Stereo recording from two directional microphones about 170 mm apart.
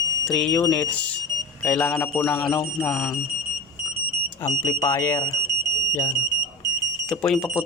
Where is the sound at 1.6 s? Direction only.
5° left (ahead or behind).